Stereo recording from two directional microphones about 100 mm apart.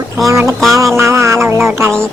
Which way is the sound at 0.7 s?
30° right (ahead or behind).